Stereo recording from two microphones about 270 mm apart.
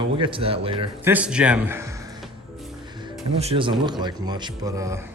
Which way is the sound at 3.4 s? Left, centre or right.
Right.